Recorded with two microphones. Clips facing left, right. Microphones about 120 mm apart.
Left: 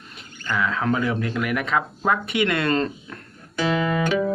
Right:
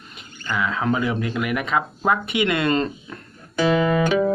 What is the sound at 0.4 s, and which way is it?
Speech, 10° right (ahead or behind).